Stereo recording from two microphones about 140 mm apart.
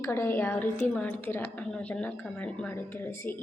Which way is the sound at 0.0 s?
20° left (ahead or behind).